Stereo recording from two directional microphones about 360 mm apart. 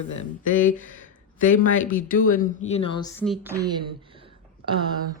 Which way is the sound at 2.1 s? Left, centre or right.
Left.